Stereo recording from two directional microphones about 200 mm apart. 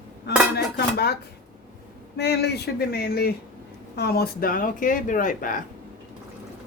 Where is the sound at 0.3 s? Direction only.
55° left (ahead or behind).